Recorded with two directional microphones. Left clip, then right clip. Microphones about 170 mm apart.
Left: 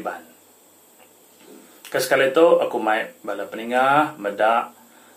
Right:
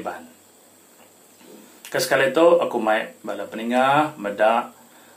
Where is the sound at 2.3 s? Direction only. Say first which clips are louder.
Even; centre (ahead or behind).